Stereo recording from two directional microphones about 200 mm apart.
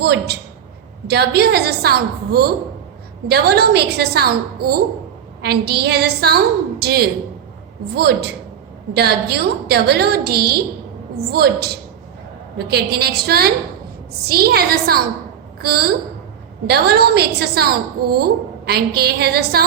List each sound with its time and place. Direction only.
0.0 s a woman's voice: 55° right (ahead or behind)